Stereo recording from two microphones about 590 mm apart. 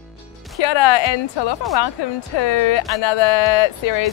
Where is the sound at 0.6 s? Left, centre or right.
Left.